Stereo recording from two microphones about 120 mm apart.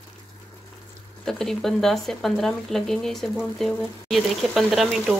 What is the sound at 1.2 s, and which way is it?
Speech, 5° left (ahead or behind).